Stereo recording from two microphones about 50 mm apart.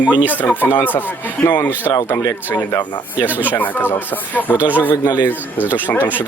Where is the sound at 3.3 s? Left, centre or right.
Right.